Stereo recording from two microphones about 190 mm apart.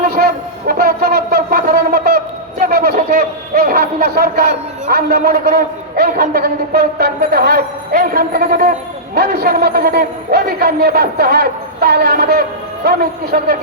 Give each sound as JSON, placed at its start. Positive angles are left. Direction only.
{"t": 0.2, "sound": "a sound", "side_deg": -55}
{"t": 0.7, "sound": "owl", "side_deg": -50}
{"t": 4.9, "sound": "a man's voice", "side_deg": -55}